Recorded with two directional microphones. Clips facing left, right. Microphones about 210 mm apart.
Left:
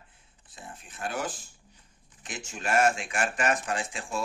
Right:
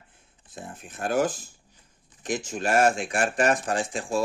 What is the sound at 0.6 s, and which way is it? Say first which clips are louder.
Speech: right 5 dB; 45° right (ahead or behind).